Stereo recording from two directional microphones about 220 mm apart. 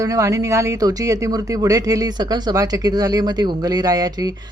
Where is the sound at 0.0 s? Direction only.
15° right (ahead or behind).